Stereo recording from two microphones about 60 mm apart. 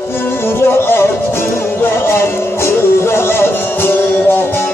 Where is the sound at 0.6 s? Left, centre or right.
Left.